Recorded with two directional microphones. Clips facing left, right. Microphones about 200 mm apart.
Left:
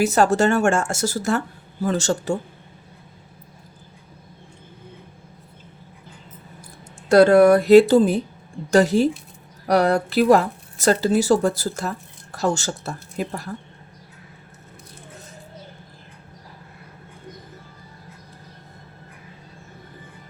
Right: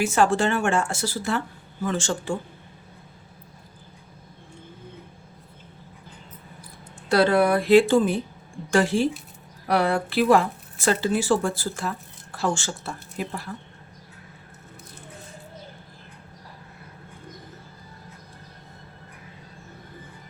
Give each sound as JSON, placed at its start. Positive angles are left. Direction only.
{"t": 0.0, "sound": "speech", "side_deg": 40}
{"t": 7.1, "sound": "speech", "side_deg": 45}